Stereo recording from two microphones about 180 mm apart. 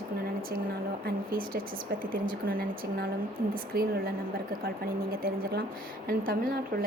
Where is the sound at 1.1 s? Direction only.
55° right (ahead or behind).